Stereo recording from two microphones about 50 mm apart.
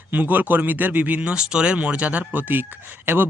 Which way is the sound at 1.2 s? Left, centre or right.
Centre.